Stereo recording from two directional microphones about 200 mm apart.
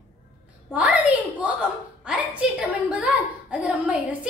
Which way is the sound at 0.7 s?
5° right (ahead or behind).